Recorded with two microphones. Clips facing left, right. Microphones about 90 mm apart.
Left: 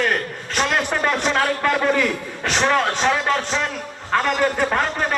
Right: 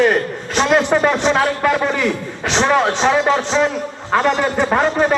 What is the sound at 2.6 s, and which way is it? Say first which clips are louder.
Speech: right 4 dB; 10° right (ahead or behind).